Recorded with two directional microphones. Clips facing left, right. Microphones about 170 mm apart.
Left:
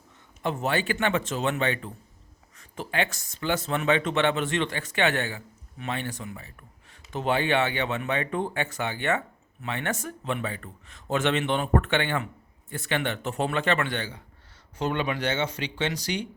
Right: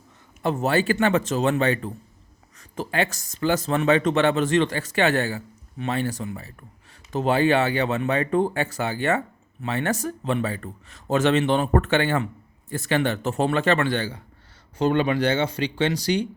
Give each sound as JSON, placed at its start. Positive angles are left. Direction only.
{"t": 0.4, "sound": "speech", "side_deg": -40}